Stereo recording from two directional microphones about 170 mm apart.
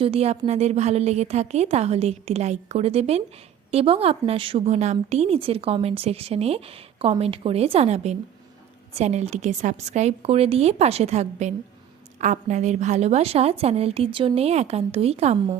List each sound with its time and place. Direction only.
0.0 s a woman's voice: 35° right (ahead or behind)